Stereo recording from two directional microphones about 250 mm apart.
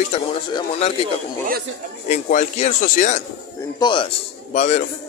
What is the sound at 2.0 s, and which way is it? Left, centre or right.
Speech, left.